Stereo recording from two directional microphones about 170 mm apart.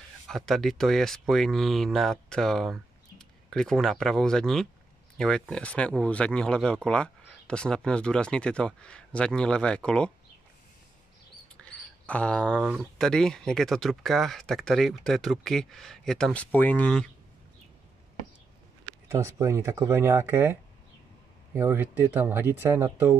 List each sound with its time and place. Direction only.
0.3 s speech: centre (ahead or behind)
11.5 s a sound: 5° left (ahead or behind)
12.9 s speech: 5° left (ahead or behind)
19.0 s speech: 15° right (ahead or behind)
21.5 s speech: 10° right (ahead or behind)